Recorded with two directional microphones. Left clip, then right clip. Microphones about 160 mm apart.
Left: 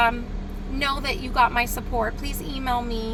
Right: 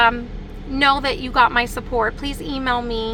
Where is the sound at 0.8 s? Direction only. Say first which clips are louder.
Right 9 dB; 20° right (ahead or behind).